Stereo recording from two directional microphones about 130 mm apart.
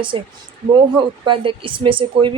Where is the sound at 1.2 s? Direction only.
40° right (ahead or behind).